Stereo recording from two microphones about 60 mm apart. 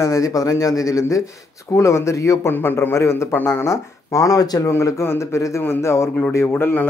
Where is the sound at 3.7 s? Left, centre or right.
Left.